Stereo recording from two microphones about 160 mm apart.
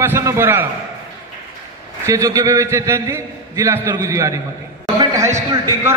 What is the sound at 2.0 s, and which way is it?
A man's voice, 20° right (ahead or behind).